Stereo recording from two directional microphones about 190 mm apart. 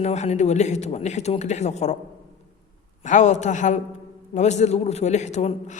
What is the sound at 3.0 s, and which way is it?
A man's voice, 40° left (ahead or behind).